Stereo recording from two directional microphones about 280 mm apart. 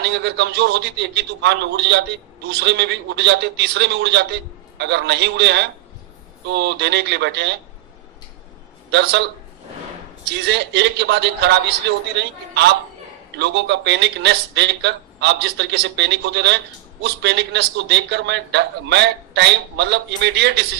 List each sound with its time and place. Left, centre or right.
0.0 s a man's voice: right
8.9 s a man's voice: right
10.4 s a man's voice: right